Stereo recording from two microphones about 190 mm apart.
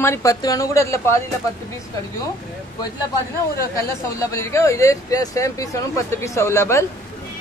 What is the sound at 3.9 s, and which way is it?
Speech, 15° left (ahead or behind).